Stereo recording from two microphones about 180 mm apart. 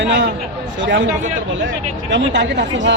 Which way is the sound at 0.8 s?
90° right.